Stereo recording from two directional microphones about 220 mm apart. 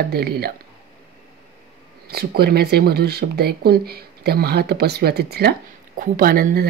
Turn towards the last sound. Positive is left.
turn(degrees=-40)  # may be behind; listen again after turning